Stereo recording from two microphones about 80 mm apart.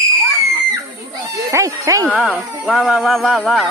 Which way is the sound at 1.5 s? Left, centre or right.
Right.